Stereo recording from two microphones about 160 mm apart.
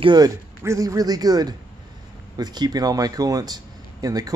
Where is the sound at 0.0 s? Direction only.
25° right (ahead or behind).